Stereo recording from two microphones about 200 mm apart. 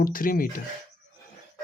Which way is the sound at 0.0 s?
45° left (ahead or behind).